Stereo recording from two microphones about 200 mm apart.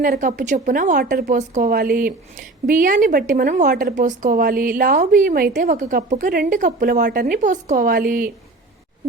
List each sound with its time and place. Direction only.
0.0 s a woman's voice: 40° right (ahead or behind)